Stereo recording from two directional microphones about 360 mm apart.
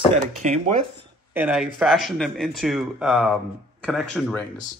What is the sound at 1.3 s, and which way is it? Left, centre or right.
Speech, centre.